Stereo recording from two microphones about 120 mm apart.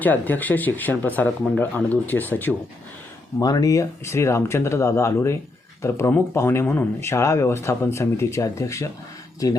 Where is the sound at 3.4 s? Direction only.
30° left (ahead or behind).